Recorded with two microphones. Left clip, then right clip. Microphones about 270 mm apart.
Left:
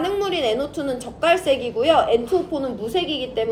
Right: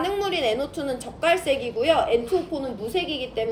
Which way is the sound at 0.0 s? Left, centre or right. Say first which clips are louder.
Left 2 dB; centre.